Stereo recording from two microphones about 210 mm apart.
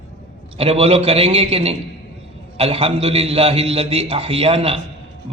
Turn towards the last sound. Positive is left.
turn(degrees=-25)  # may be behind; listen again after turning